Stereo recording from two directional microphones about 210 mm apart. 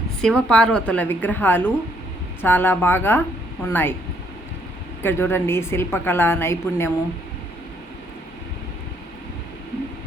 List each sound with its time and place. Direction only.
0.2 s a woman's voice: 5° left (ahead or behind)
5.0 s a woman's voice: 10° left (ahead or behind)